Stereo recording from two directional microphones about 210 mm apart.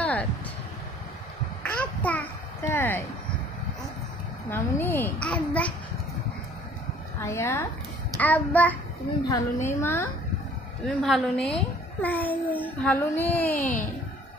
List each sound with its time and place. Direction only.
0.0 s vehicle: 5° left (ahead or behind)
1.6 s a sound: 5° left (ahead or behind)
4.5 s a child's voice: 10° left (ahead or behind)
7.2 s a woman's voice: 15° left (ahead or behind)
13.6 s a child's voice: 35° left (ahead or behind)